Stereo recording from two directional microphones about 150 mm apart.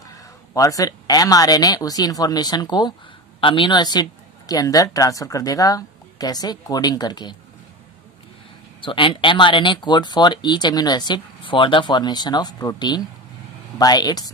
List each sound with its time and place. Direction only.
0.6 s speech: 20° left (ahead or behind)
8.8 s speech: 35° left (ahead or behind)